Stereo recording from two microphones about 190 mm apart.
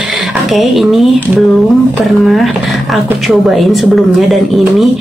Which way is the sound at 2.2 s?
Centre (ahead or behind).